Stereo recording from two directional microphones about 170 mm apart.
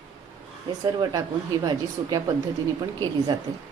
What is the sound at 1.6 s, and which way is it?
Speech, 25° right (ahead or behind).